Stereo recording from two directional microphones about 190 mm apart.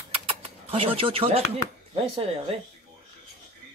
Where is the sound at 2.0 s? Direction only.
30° right (ahead or behind).